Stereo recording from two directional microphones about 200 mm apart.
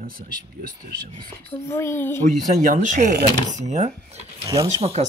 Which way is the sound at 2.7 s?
40° right (ahead or behind).